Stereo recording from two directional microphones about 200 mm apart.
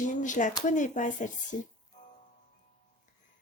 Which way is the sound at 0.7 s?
40° left (ahead or behind).